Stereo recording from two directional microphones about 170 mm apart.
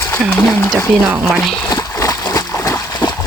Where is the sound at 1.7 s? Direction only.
15° left (ahead or behind).